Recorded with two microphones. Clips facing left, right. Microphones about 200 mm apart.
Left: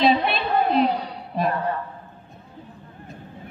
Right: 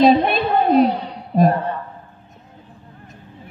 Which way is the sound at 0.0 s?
45° right (ahead or behind).